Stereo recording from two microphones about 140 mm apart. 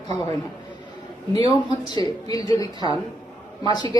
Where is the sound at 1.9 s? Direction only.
30° left (ahead or behind).